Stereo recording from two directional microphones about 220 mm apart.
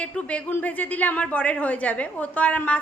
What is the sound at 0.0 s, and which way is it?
A woman's voice, 5° left (ahead or behind).